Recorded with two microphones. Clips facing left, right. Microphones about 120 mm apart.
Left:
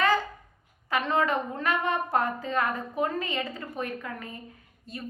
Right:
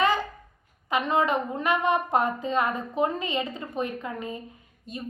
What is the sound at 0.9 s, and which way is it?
A woman's voice, 20° right (ahead or behind).